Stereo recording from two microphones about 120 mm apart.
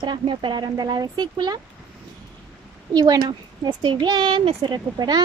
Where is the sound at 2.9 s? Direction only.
35° right (ahead or behind).